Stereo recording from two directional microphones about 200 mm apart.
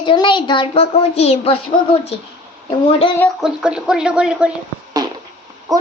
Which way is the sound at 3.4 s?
5° right (ahead or behind).